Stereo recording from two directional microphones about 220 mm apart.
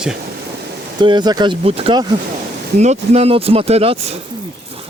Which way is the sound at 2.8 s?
30° right (ahead or behind).